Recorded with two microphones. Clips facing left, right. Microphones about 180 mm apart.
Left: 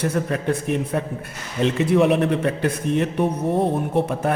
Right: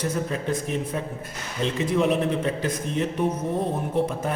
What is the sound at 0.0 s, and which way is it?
A man's voice, 65° left (ahead or behind).